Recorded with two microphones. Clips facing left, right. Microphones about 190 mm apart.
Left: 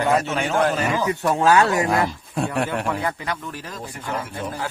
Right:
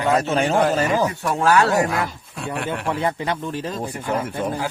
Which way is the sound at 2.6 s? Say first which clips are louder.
Right 1 dB; 25° right (ahead or behind).